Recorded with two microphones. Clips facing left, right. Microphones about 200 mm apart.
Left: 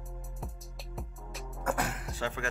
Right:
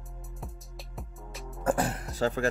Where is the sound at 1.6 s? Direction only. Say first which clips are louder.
Right 5 dB; 30° right (ahead or behind).